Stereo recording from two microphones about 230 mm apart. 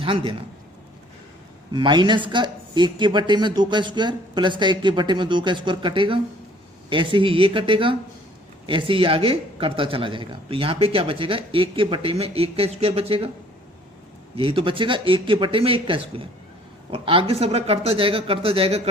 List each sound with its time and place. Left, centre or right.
0.0 s speech: right
1.7 s speech: centre
14.3 s speech: right